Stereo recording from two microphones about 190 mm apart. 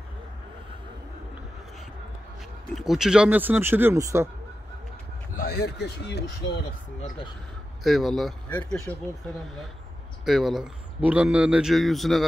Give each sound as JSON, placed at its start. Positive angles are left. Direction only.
{"t": 2.7, "sound": "speech", "side_deg": 0}
{"t": 5.3, "sound": "speech", "side_deg": 50}
{"t": 7.8, "sound": "speech", "side_deg": 0}
{"t": 10.2, "sound": "speech", "side_deg": 0}